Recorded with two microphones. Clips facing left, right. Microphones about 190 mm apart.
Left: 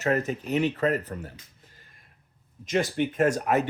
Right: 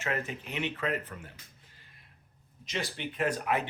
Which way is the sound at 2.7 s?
50° left (ahead or behind).